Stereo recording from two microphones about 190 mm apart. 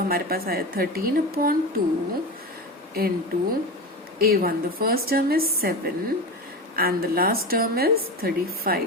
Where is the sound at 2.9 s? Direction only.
50° right (ahead or behind).